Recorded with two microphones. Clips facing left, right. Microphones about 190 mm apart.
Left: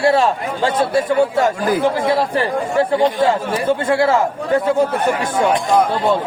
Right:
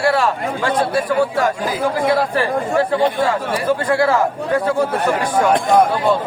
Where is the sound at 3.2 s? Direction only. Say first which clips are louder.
Left 2 dB; 25° left (ahead or behind).